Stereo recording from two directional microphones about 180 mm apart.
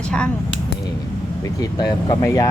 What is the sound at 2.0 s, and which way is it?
Speech, 20° left (ahead or behind).